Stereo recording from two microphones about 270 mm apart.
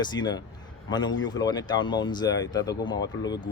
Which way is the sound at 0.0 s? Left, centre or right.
Centre.